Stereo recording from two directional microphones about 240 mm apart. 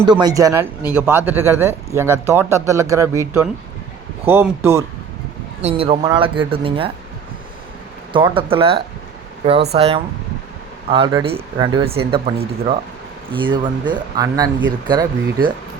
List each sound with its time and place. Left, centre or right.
0.1 s speech: centre
5.6 s speech: right
8.1 s speech: right
9.7 s speech: right